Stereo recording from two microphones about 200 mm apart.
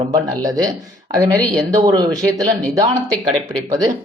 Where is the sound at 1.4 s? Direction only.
Centre (ahead or behind).